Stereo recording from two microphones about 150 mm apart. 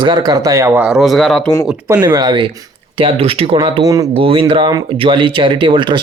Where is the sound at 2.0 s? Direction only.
30° right (ahead or behind).